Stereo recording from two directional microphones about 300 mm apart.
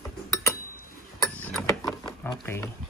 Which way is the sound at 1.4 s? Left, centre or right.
Centre.